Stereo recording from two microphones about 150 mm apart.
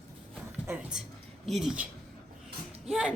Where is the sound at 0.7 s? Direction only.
15° right (ahead or behind).